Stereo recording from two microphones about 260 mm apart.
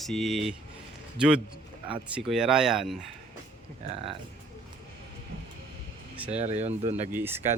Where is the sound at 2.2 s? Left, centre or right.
Centre.